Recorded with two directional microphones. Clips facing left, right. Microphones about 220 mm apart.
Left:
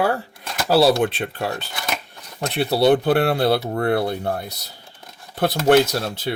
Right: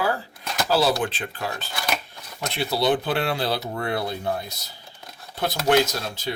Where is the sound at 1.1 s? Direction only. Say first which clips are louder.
Left 5 dB; 65° left (ahead or behind).